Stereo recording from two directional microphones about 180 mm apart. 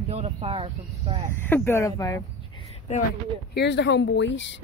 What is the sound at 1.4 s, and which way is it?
Speech, 10° left (ahead or behind).